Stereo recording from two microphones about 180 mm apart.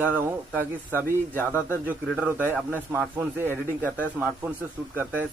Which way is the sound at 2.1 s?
10° right (ahead or behind).